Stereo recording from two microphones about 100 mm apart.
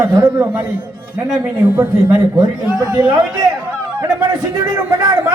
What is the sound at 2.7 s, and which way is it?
Speech, 40° right (ahead or behind).